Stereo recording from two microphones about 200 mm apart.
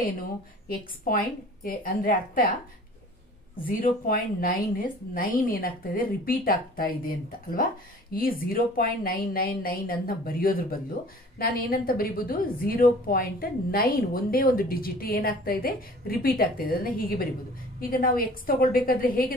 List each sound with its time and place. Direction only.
0.7 s a woman's voice: 45° left (ahead or behind)
3.6 s a woman's voice: 45° left (ahead or behind)